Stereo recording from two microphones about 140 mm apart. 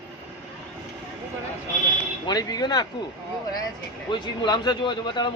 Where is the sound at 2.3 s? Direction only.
30° left (ahead or behind).